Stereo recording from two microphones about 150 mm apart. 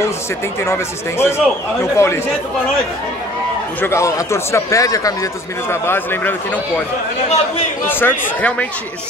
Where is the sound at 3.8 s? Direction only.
20° left (ahead or behind).